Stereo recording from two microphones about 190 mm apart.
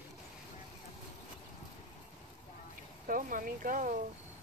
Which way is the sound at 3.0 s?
45° right (ahead or behind).